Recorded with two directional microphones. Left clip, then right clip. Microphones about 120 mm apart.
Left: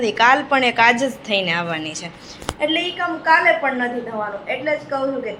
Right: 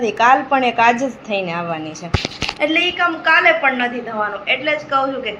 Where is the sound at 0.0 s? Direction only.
5° left (ahead or behind).